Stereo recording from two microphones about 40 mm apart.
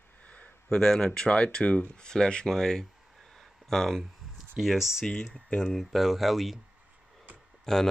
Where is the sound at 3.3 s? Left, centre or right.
Centre.